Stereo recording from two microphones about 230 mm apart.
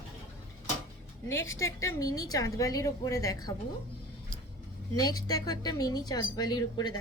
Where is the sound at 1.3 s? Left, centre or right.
Centre.